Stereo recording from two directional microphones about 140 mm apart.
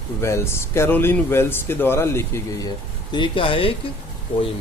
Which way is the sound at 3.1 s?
35° left (ahead or behind).